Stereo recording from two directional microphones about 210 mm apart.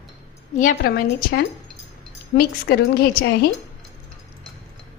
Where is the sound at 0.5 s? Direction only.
45° left (ahead or behind).